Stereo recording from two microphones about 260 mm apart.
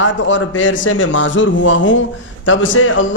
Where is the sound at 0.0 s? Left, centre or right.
Left.